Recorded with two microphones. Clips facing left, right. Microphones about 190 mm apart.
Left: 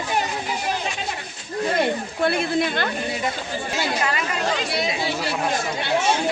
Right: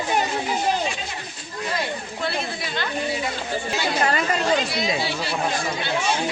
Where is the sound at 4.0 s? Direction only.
40° right (ahead or behind).